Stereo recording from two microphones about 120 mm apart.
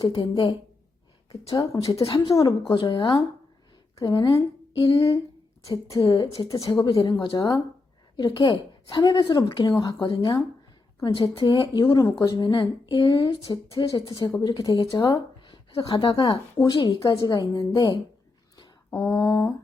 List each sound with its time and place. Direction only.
0.0 s speech: 45° left (ahead or behind)
1.3 s a woman's voice: 30° left (ahead or behind)
2.7 s a woman's voice: 40° left (ahead or behind)
5.6 s a woman's voice: 30° left (ahead or behind)
6.1 s a woman's voice: 40° left (ahead or behind)
18.9 s a sound: 15° left (ahead or behind)